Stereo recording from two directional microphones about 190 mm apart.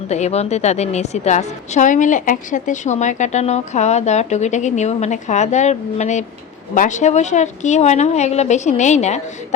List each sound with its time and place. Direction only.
0.1 s a woman's voice: 35° left (ahead or behind)